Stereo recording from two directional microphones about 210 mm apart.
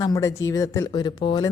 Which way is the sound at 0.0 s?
15° left (ahead or behind).